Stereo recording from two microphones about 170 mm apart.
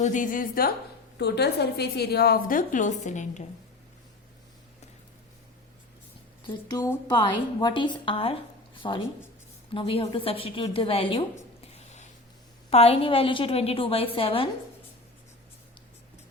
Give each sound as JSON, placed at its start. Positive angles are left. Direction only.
{"t": 0.0, "sound": "a woman's voice", "side_deg": 50}
{"t": 1.2, "sound": "a woman's voice", "side_deg": 75}
{"t": 6.5, "sound": "a woman's voice", "side_deg": 25}